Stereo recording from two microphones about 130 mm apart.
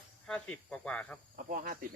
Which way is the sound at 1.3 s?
90° right.